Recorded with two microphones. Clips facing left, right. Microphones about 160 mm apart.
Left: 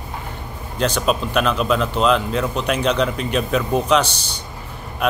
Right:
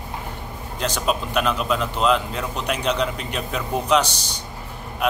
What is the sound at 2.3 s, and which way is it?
A man's voice, 65° left (ahead or behind).